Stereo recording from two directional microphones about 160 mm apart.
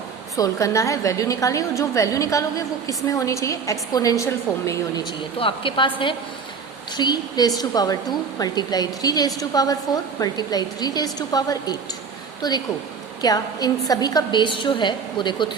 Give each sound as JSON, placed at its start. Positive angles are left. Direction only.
{"t": 0.3, "sound": "a woman's voice", "side_deg": 20}
{"t": 5.4, "sound": "a woman's voice", "side_deg": 30}